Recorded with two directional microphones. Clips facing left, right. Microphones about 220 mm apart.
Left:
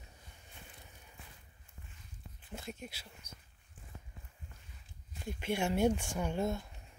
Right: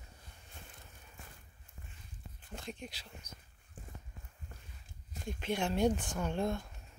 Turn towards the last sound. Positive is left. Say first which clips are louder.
# even
turn(degrees=5)  # may be behind; listen again after turning